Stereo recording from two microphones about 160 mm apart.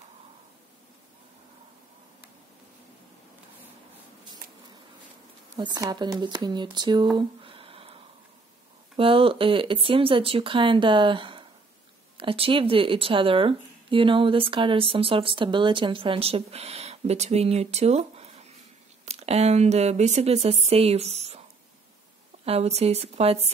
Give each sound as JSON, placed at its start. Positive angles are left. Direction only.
{"t": 5.6, "sound": "speech", "side_deg": -25}
{"t": 7.2, "sound": "a sound", "side_deg": -35}
{"t": 8.9, "sound": "speech", "side_deg": -35}
{"t": 22.4, "sound": "speech", "side_deg": -40}